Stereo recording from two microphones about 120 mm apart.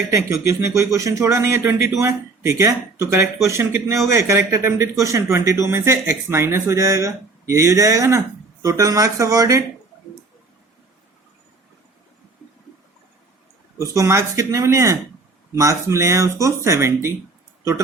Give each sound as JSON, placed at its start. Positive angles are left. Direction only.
{"t": 0.1, "sound": "speech", "side_deg": -25}
{"t": 13.7, "sound": "speech", "side_deg": -25}